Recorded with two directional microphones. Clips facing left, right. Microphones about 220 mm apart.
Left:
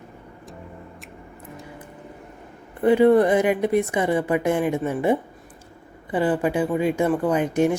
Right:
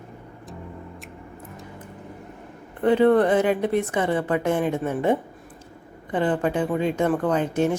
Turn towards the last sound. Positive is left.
turn(degrees=10)  # may be behind; listen again after turning